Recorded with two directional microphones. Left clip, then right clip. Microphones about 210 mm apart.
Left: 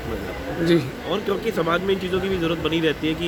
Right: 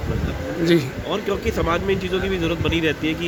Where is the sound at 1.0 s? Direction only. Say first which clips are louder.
Right 1 dB; 20° right (ahead or behind).